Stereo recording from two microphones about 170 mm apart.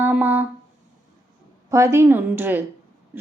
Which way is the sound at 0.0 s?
10° right (ahead or behind).